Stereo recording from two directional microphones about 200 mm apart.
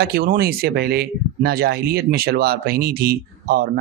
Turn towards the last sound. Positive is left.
turn(degrees=-50)  # may be behind; listen again after turning